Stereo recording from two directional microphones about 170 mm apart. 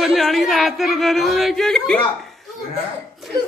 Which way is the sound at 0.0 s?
Centre (ahead or behind).